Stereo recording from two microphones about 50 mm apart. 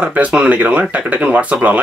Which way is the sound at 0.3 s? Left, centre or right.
Right.